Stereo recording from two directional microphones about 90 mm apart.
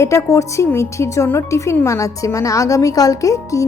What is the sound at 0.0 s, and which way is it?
A woman's voice, 30° left (ahead or behind).